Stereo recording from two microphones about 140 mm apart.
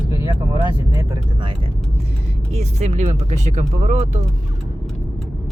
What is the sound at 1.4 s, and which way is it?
Speech, 35° right (ahead or behind).